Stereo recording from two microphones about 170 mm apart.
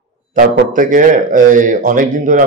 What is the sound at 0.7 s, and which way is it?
A man's voice, 50° right (ahead or behind).